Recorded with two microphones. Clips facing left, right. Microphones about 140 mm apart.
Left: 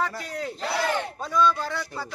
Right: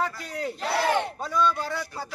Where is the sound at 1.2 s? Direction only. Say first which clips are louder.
Left 6 dB; 10° right (ahead or behind).